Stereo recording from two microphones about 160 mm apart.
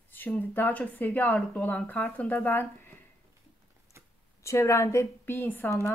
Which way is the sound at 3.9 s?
15° right (ahead or behind).